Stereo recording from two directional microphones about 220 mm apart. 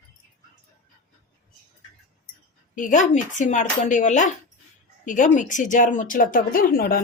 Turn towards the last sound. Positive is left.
turn(degrees=40)  # may be behind; listen again after turning